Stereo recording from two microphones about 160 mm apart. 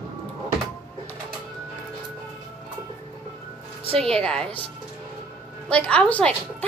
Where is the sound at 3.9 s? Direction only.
5° left (ahead or behind).